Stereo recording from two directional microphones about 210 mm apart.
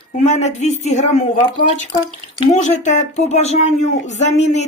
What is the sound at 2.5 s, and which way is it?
Speech, 35° left (ahead or behind).